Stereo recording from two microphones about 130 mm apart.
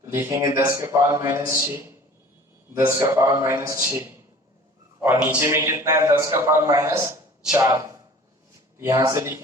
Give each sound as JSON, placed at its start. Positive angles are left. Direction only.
{"t": 0.0, "sound": "a man's voice", "side_deg": -20}
{"t": 3.0, "sound": "a man's voice", "side_deg": -25}